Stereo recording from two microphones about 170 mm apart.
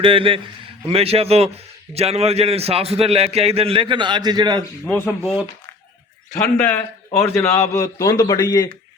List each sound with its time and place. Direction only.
0.0 s a man's voice: 30° right (ahead or behind)
4.9 s a man's voice: 10° left (ahead or behind)
6.3 s a man's voice: 10° left (ahead or behind)